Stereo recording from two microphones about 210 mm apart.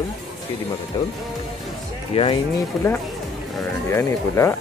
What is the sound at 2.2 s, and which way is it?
Speech, 25° left (ahead or behind).